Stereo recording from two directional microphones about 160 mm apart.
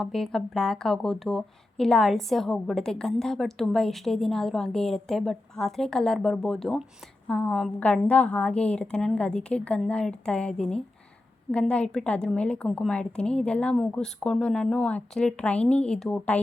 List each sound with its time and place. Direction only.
0.0 s a woman's voice: centre (ahead or behind)